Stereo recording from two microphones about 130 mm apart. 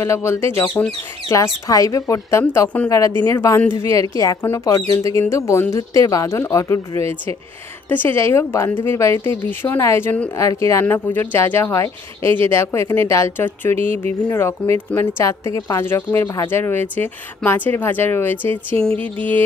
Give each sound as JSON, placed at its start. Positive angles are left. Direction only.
{"t": 0.0, "sound": "speech", "side_deg": 20}